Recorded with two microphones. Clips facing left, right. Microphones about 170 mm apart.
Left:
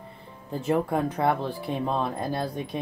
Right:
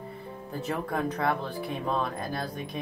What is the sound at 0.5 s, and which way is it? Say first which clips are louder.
Speech: left 7 dB; 25° left (ahead or behind).